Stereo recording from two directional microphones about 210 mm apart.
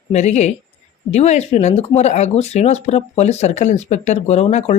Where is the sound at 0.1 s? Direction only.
30° left (ahead or behind).